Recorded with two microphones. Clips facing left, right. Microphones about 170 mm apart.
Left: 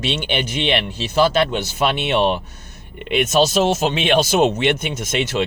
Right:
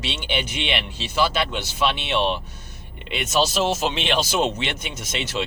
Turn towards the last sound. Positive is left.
turn(degrees=55)  # may be behind; listen again after turning